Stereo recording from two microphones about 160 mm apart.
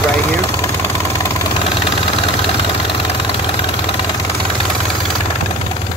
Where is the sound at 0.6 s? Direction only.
15° left (ahead or behind).